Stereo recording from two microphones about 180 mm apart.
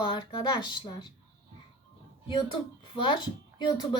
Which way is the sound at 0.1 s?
25° left (ahead or behind).